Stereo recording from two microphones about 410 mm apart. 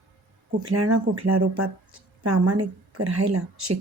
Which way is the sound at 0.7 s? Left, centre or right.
Right.